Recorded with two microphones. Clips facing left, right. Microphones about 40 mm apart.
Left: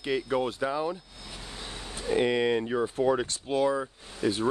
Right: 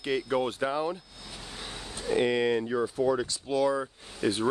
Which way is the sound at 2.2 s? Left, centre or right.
Centre.